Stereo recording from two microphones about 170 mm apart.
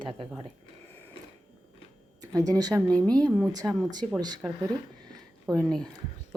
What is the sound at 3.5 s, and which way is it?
Speech, 20° right (ahead or behind).